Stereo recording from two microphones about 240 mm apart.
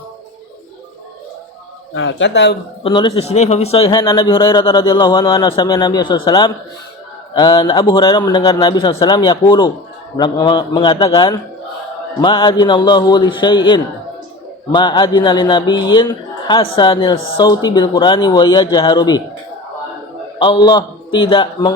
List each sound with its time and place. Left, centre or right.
2.0 s speech: left
2.8 s a man's voice: left
20.4 s speech: centre